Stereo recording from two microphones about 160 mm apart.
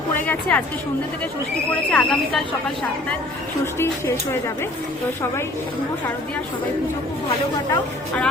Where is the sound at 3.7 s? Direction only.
15° left (ahead or behind).